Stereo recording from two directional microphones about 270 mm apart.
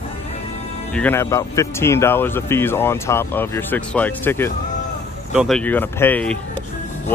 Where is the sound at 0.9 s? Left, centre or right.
Centre.